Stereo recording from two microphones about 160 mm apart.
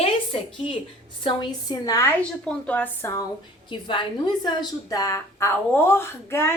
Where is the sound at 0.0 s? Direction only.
35° left (ahead or behind).